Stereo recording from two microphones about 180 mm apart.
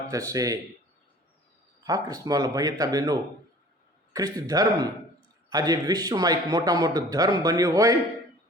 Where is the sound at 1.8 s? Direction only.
20° right (ahead or behind).